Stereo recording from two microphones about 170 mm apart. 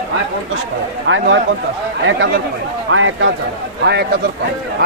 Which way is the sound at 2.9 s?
90° right.